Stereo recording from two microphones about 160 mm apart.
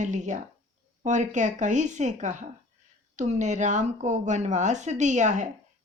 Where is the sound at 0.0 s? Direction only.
50° right (ahead or behind).